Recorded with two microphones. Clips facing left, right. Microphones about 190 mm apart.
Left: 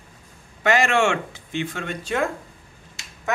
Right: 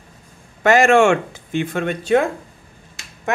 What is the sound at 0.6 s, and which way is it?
Speech, 45° right (ahead or behind).